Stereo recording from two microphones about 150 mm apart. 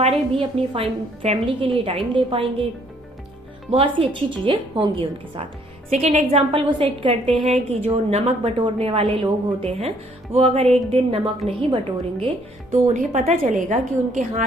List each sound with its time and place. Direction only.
0.0 s a woman's voice: 35° right (ahead or behind)
3.7 s a woman's voice: 40° right (ahead or behind)
5.9 s a woman's voice: 50° right (ahead or behind)
6.7 s a woman's voice: 35° right (ahead or behind)
12.7 s a woman's voice: 50° right (ahead or behind)